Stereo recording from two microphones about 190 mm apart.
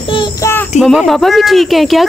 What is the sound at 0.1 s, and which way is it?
Child singing, 25° left (ahead or behind).